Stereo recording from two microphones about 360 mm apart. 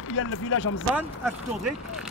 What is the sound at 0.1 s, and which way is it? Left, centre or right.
Speech, left.